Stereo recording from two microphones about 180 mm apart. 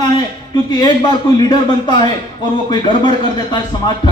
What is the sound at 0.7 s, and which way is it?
A man's voice, 25° left (ahead or behind).